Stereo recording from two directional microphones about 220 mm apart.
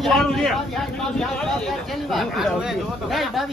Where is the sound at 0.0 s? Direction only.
Centre (ahead or behind).